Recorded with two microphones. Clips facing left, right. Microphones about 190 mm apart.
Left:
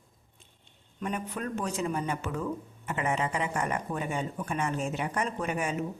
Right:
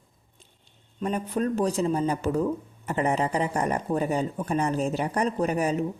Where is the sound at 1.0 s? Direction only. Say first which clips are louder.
Right 7 dB; 35° right (ahead or behind).